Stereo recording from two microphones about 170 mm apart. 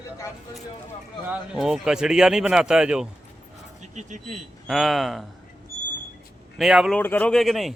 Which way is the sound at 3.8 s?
45° right (ahead or behind).